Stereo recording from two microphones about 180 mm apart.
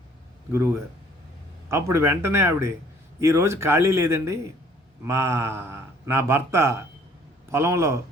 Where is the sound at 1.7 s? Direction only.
15° right (ahead or behind).